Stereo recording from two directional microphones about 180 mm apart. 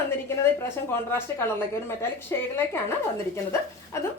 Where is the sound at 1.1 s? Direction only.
15° left (ahead or behind).